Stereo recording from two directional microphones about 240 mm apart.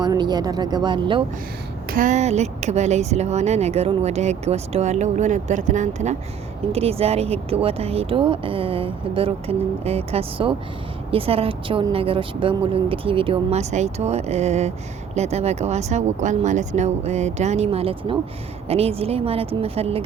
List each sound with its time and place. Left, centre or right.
0.0 s speech: centre
1.9 s speech: right